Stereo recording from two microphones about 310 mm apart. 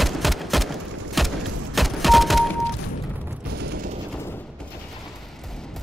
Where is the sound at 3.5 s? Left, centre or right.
Right.